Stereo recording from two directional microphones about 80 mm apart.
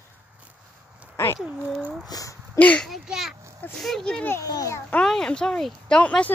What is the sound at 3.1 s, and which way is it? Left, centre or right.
Speech, centre.